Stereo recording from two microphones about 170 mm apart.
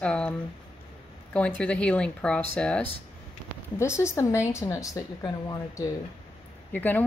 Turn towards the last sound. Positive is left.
turn(degrees=10)  # may be behind; listen again after turning